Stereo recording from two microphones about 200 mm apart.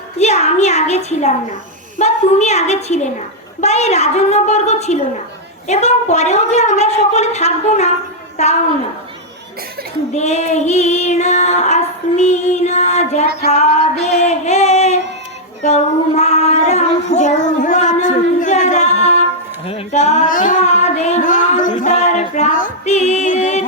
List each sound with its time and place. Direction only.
0.2 s a sound: 35° left (ahead or behind)
2.0 s child singing: 35° left (ahead or behind)
10.2 s child singing: 35° left (ahead or behind)
13.5 s music: 35° left (ahead or behind)
15.6 s child singing: 35° left (ahead or behind)
19.6 s female singing: 30° left (ahead or behind)